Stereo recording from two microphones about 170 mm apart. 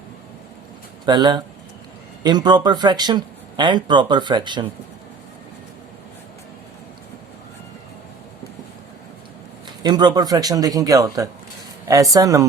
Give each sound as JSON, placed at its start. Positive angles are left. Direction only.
{"t": 1.0, "sound": "speech", "side_deg": -25}
{"t": 9.8, "sound": "speech", "side_deg": -25}